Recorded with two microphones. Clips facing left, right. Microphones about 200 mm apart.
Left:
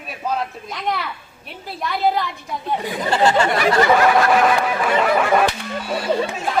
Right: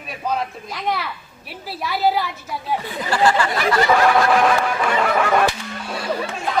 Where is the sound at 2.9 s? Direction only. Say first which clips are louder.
Left 1 dB; 25° left (ahead or behind).